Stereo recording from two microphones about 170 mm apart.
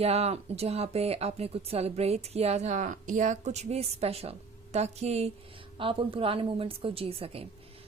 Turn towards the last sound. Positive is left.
turn(degrees=-35)  # may be behind; listen again after turning